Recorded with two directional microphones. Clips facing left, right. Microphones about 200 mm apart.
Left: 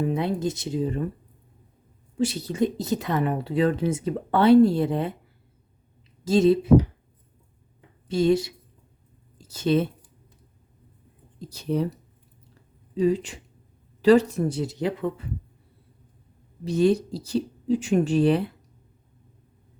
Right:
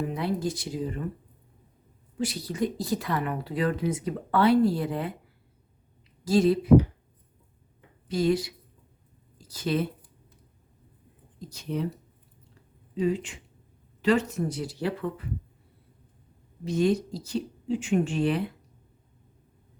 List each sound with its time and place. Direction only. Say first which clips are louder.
0.1 s speech: left 3 dB; 20° left (ahead or behind)
2.1 s speech: left 5 dB; 25° left (ahead or behind)
6.2 s speech: left 3 dB; 25° left (ahead or behind)
8.0 s speech: left 4 dB; 25° left (ahead or behind)
11.3 s speech: left 5 dB; 35° left (ahead or behind)
12.9 s speech: left 4 dB; 35° left (ahead or behind); by 15.1 s 20° left (ahead or behind)
16.6 s speech: left 4 dB; 35° left (ahead or behind)